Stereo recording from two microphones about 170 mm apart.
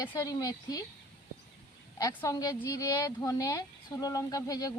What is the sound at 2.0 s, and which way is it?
A woman's voice, 20° left (ahead or behind).